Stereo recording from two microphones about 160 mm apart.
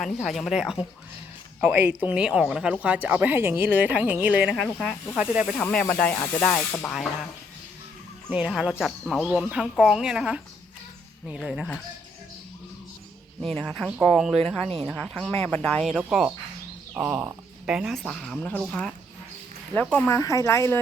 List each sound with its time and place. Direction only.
0.0 s speech: centre (ahead or behind)
1.9 s a woman's voice: 10° right (ahead or behind)
5.5 s speech: 10° left (ahead or behind)
6.1 s snake: 25° left (ahead or behind)
6.4 s speech: 15° left (ahead or behind)
8.3 s speech: 5° right (ahead or behind)
13.4 s speech: centre (ahead or behind)